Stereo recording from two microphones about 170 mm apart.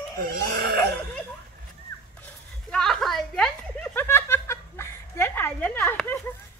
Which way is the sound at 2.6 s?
5° left (ahead or behind).